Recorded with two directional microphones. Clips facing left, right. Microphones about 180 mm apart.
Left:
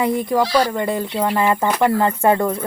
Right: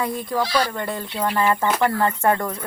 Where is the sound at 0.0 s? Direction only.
20° left (ahead or behind).